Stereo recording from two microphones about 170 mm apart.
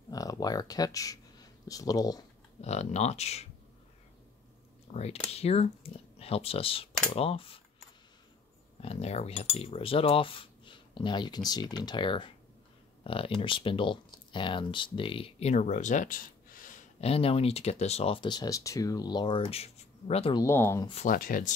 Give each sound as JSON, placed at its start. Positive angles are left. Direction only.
{"t": 0.1, "sound": "speech", "side_deg": 20}
{"t": 2.6, "sound": "cutlery", "side_deg": 40}
{"t": 4.9, "sound": "speech", "side_deg": 35}
{"t": 5.3, "sound": "cutlery", "side_deg": 35}
{"t": 8.8, "sound": "cutlery", "side_deg": 40}
{"t": 13.0, "sound": "speech", "side_deg": 30}
{"t": 17.0, "sound": "cutlery", "side_deg": 35}
{"t": 20.3, "sound": "speech", "side_deg": 15}
{"t": 20.8, "sound": "cutlery", "side_deg": 35}
{"t": 21.1, "sound": "speech", "side_deg": 55}